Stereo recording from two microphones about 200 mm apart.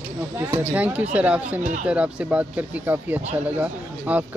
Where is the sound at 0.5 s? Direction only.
10° right (ahead or behind).